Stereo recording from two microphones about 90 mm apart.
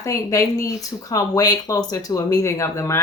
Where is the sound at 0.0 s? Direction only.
35° left (ahead or behind).